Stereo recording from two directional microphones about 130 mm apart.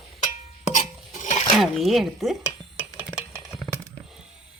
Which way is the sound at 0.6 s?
70° left (ahead or behind).